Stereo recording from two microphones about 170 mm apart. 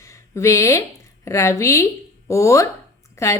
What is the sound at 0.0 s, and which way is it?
A woman's voice, 20° left (ahead or behind).